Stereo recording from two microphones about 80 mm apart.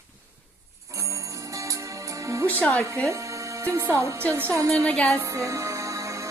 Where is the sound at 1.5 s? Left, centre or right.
Right.